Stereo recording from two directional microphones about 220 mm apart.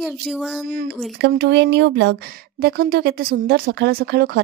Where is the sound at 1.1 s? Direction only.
50° right (ahead or behind).